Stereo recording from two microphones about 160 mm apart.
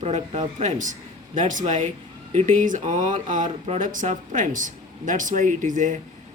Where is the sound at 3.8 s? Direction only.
55° right (ahead or behind).